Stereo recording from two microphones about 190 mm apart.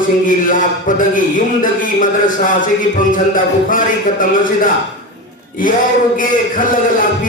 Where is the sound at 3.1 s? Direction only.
45° left (ahead or behind).